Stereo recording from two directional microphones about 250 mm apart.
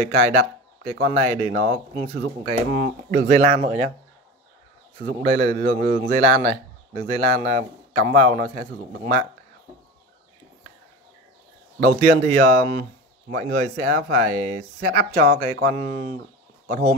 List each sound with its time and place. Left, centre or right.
0.0 s speech: right
5.2 s speech: right
11.8 s speech: right